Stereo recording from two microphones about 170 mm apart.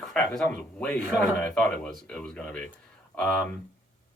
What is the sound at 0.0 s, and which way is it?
Speech, 5° left (ahead or behind).